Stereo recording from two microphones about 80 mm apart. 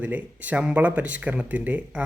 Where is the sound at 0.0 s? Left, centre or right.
Centre.